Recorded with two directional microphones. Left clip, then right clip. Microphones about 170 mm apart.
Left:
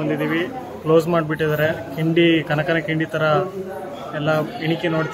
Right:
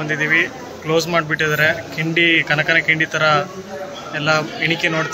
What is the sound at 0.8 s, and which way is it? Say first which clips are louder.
A man's voice: even; 40° left (ahead or behind).